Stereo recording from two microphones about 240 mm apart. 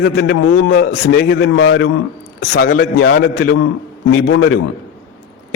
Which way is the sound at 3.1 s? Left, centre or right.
Left.